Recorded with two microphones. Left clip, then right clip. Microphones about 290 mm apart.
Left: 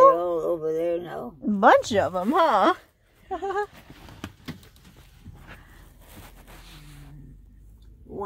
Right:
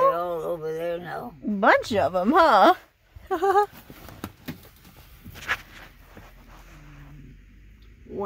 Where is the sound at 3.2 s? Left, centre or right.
Centre.